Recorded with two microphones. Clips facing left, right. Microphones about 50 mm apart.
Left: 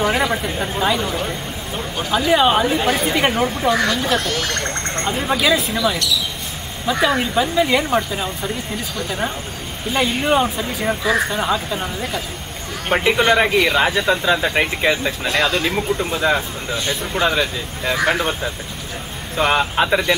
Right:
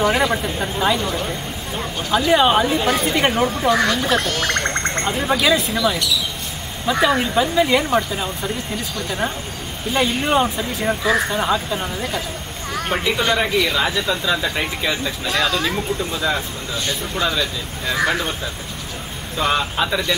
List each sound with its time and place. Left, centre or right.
0.0 s speech: centre
4.3 s speech: right
5.2 s speech: centre
9.9 s speech: centre
12.9 s speech: left
19.3 s speech: left